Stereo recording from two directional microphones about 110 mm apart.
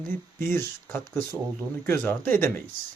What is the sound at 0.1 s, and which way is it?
Speech, 20° left (ahead or behind).